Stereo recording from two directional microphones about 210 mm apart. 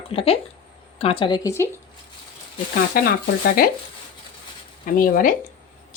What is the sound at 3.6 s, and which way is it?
Speech, 45° left (ahead or behind).